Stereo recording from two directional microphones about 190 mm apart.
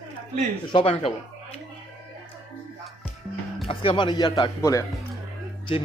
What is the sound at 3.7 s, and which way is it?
A man's voice, 25° left (ahead or behind).